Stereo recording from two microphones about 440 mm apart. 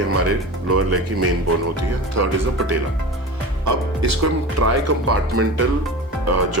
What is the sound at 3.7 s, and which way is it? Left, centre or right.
Speech, right.